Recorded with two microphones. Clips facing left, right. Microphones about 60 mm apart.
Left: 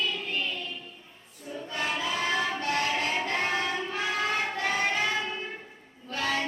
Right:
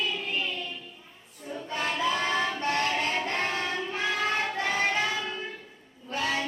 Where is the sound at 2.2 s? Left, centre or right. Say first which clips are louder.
Right 1 dB; centre.